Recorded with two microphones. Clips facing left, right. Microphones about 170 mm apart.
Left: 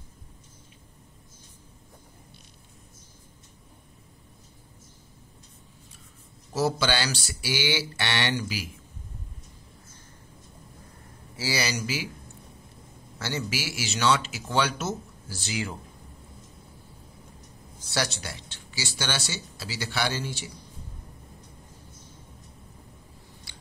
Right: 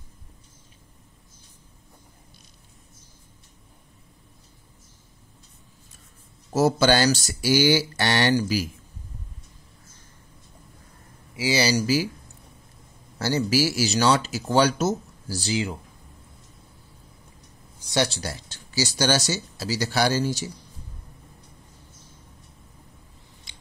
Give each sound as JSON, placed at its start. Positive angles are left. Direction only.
{"t": 6.5, "sound": "speech", "side_deg": -45}
{"t": 11.3, "sound": "speech", "side_deg": -20}
{"t": 11.6, "sound": "speech", "side_deg": -35}
{"t": 13.2, "sound": "speech", "side_deg": -40}
{"t": 17.8, "sound": "speech", "side_deg": -25}
{"t": 23.5, "sound": "scissors", "side_deg": -20}